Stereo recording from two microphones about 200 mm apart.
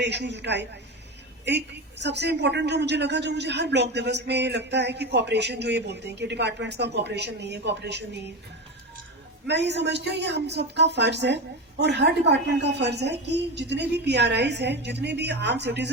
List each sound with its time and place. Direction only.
0.0 s a woman's voice: 55° right (ahead or behind)
9.5 s a woman's voice: 60° right (ahead or behind)